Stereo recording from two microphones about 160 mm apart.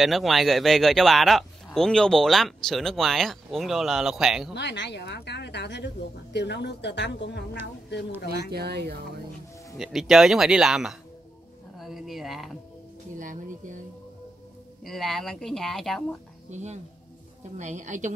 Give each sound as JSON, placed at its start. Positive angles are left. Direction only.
{"t": 0.0, "sound": "speech", "side_deg": 0}
{"t": 4.6, "sound": "speech", "side_deg": 90}
{"t": 8.5, "sound": "speech", "side_deg": -90}
{"t": 9.8, "sound": "speech", "side_deg": 0}
{"t": 13.2, "sound": "speech", "side_deg": -55}
{"t": 14.8, "sound": "speech", "side_deg": 0}
{"t": 16.4, "sound": "speech", "side_deg": -45}